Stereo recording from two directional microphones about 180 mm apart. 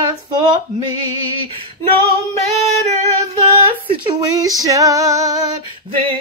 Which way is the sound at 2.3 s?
35° right (ahead or behind).